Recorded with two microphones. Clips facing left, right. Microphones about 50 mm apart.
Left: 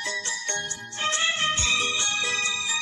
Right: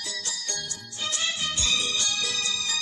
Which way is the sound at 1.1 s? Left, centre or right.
Left.